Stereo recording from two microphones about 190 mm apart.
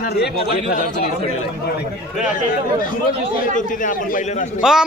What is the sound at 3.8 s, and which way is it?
Speech, 45° left (ahead or behind).